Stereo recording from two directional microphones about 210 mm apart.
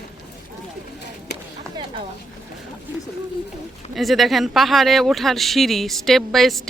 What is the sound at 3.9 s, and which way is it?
Speech, centre (ahead or behind).